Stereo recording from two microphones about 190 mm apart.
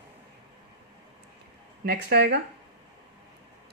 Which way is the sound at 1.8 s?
60° right (ahead or behind).